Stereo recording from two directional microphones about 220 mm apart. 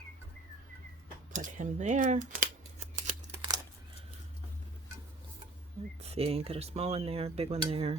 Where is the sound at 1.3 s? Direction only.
35° right (ahead or behind).